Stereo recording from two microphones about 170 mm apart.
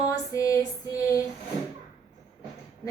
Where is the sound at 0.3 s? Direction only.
20° left (ahead or behind).